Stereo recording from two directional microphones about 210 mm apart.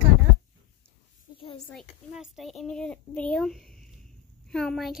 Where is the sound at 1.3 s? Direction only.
25° left (ahead or behind).